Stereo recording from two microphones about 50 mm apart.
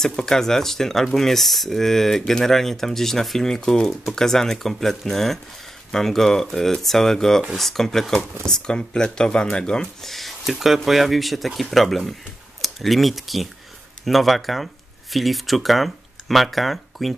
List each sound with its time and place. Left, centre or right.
0.0 s speech: centre
10.0 s speech: centre